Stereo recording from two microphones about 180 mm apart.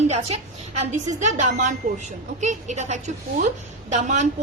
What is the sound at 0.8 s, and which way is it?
A woman's voice, 40° right (ahead or behind).